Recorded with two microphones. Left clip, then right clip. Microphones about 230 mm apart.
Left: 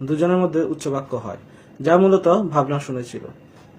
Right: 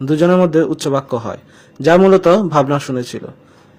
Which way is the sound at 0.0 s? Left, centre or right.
Right.